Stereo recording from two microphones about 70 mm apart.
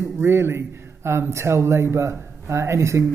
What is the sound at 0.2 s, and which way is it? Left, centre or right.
Speech, right.